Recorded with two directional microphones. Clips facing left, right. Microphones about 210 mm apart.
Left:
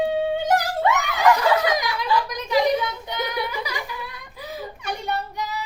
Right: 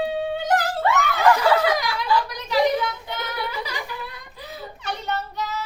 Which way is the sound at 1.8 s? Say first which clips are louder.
Even; 20° left (ahead or behind).